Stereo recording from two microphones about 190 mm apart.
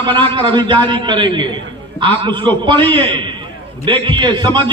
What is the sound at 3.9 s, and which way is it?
Speech, 25° right (ahead or behind).